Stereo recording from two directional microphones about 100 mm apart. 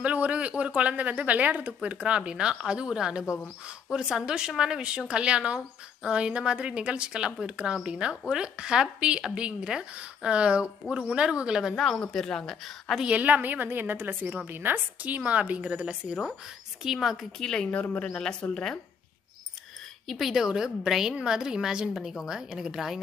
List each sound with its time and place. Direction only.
0.0 s a woman's voice: 15° right (ahead or behind); by 13.0 s centre (ahead or behind)
13.0 s a woman's voice: 15° right (ahead or behind)
17.4 s a woman's voice: 5° left (ahead or behind)
20.1 s a woman's voice: centre (ahead or behind)